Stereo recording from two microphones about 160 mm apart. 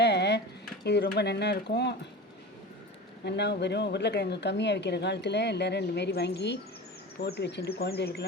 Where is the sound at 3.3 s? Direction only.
90° left.